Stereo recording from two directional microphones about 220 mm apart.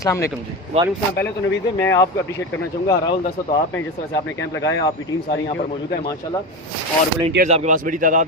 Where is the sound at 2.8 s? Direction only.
15° left (ahead or behind).